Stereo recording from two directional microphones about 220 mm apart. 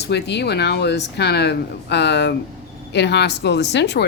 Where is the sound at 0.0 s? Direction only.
50° left (ahead or behind).